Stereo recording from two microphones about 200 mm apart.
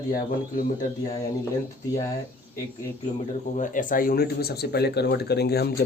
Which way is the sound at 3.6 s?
40° left (ahead or behind).